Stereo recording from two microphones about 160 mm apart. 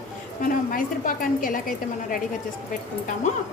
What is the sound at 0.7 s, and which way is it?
A woman's voice, 60° left (ahead or behind).